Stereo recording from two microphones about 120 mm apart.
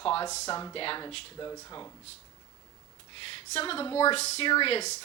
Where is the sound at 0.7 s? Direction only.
45° left (ahead or behind).